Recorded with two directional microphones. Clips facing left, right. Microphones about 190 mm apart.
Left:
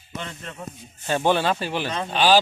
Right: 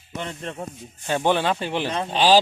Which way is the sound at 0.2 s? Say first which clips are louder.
Right 4 dB; 25° right (ahead or behind).